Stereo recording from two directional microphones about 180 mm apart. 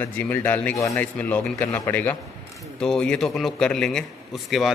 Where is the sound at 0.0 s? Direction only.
10° left (ahead or behind).